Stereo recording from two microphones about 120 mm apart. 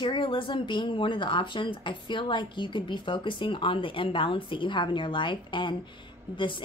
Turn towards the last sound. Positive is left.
turn(degrees=45)  # may be behind; listen again after turning